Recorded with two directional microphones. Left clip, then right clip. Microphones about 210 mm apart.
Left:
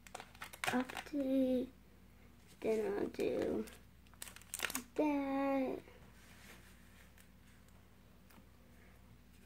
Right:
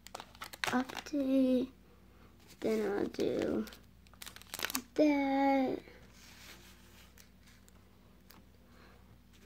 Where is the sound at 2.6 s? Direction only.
40° right (ahead or behind).